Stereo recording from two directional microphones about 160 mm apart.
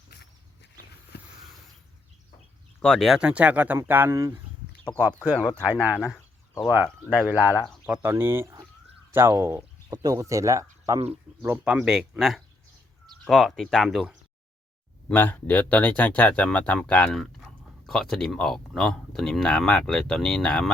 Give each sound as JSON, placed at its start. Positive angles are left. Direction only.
{"t": 0.1, "sound": "a sound", "side_deg": 80}
{"t": 2.8, "sound": "speech", "side_deg": 0}
{"t": 5.7, "sound": "speech", "side_deg": 20}
{"t": 6.6, "sound": "speech", "side_deg": -10}
{"t": 15.1, "sound": "speech", "side_deg": 10}